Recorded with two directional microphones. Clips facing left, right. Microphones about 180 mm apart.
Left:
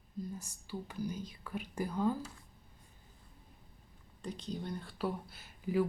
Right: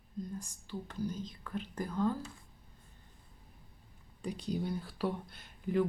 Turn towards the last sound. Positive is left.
turn(degrees=5)  # may be behind; listen again after turning